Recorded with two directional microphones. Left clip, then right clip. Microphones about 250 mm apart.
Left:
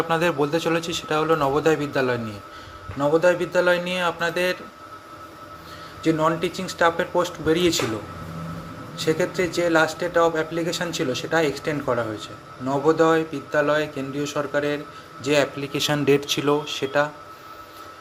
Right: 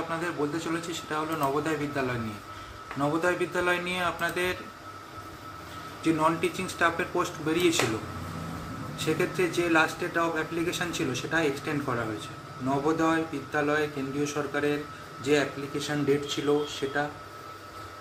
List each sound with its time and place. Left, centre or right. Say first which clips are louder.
0.1 s speech: left 10 dB; left
6.0 s speech: left 4 dB; centre
9.0 s speech: left 5 dB; centre